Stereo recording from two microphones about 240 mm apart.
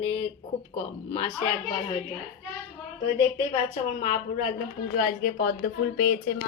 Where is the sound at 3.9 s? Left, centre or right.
Left.